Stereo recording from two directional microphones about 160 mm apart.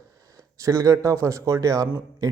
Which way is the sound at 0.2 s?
20° right (ahead or behind).